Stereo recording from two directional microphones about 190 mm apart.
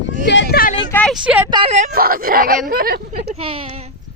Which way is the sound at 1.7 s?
45° right (ahead or behind).